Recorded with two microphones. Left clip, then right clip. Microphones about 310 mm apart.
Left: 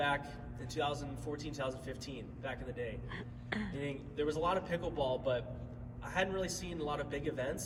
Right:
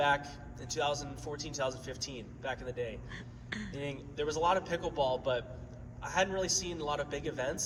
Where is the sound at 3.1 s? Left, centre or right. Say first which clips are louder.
Left 1 dB; centre.